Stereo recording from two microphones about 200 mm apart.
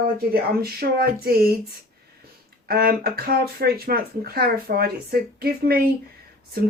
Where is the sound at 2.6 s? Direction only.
50° right (ahead or behind).